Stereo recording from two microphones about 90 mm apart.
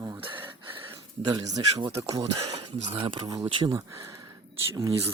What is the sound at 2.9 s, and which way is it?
Speech, 65° right (ahead or behind).